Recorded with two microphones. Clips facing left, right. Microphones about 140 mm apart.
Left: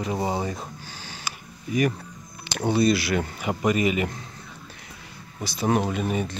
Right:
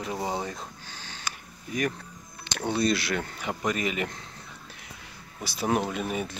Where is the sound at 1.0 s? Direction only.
5° left (ahead or behind).